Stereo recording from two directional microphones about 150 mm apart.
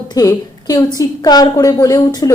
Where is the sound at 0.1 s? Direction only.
25° left (ahead or behind).